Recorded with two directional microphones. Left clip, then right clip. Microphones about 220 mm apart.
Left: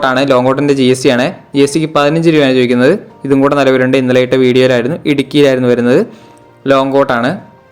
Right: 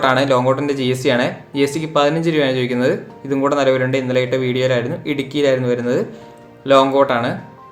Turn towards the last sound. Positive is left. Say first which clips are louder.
# left 4 dB
turn(degrees=35)  # may be behind; listen again after turning